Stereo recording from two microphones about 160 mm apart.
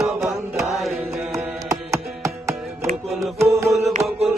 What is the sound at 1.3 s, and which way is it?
Music, 20° right (ahead or behind).